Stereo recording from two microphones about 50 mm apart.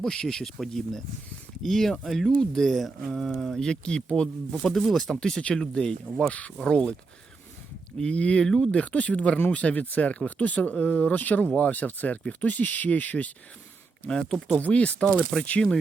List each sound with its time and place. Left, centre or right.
0.0 s speech: centre
4.7 s speech: centre
5.4 s speech: centre
7.9 s speech: left
8.4 s speech: centre
8.7 s speech: left
14.1 s speech: centre
14.6 s speech: left
15.2 s speech: centre